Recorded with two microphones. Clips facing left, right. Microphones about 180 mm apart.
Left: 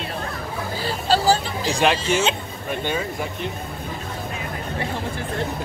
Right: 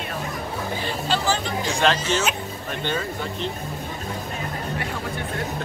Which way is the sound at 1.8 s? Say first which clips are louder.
Left 2 dB; 15° left (ahead or behind).